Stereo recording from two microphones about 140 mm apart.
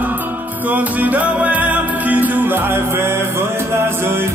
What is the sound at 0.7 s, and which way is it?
Music, 10° right (ahead or behind).